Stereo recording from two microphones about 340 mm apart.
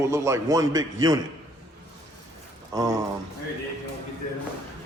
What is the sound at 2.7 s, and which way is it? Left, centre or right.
Speech, centre.